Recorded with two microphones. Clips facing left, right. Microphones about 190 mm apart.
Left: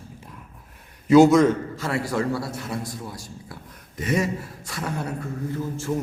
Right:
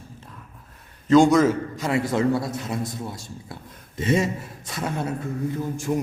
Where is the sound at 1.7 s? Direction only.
20° right (ahead or behind).